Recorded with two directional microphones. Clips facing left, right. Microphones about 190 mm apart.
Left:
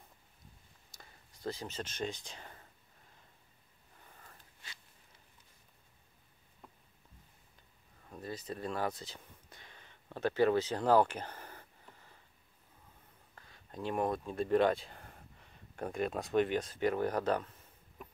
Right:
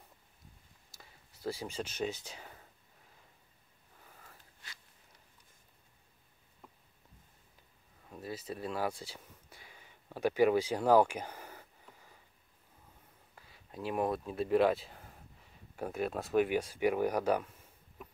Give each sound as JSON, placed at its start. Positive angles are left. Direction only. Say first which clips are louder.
{"t": 0.9, "sound": "speech", "louder": "even", "side_deg": -5}
{"t": 8.1, "sound": "a sound", "louder": "right 1 dB", "side_deg": -5}
{"t": 13.3, "sound": "speech", "louder": "even", "side_deg": -5}